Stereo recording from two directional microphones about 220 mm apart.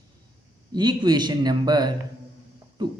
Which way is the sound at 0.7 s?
20° right (ahead or behind).